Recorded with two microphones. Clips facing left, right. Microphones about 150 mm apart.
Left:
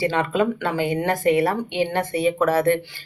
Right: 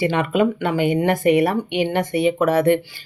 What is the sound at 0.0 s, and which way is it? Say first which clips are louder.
Speech: right 2 dB; 15° right (ahead or behind).